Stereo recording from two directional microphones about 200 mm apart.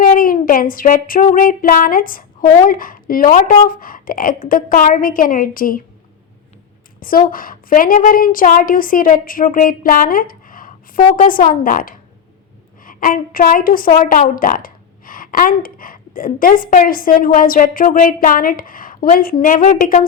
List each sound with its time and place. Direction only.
0.0 s child singing: 45° left (ahead or behind)
3.7 s a woman's voice: 45° left (ahead or behind)
7.3 s a woman's voice: 45° left (ahead or behind)